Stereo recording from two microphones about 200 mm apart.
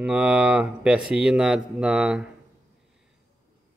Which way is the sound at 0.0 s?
5° right (ahead or behind).